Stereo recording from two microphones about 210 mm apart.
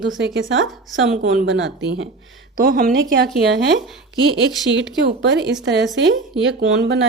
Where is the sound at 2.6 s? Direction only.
40° right (ahead or behind).